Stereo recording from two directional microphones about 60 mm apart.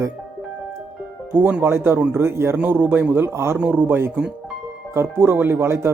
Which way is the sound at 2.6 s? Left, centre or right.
Right.